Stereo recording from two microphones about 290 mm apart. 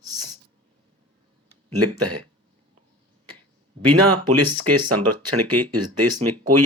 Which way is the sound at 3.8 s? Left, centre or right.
Right.